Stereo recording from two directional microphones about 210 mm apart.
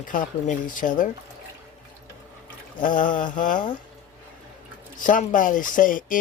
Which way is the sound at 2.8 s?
40° left (ahead or behind).